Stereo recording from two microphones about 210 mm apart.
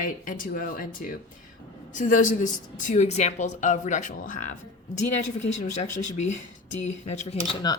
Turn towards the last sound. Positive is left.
turn(degrees=30)  # may be behind; listen again after turning